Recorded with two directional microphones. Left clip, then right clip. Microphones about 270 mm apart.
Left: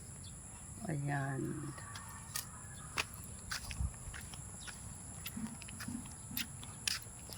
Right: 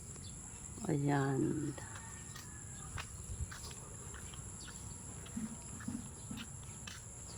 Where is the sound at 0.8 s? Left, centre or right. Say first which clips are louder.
Right 5 dB; centre.